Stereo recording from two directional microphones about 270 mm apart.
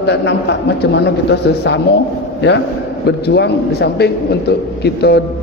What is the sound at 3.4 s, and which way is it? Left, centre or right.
A man's voice, left.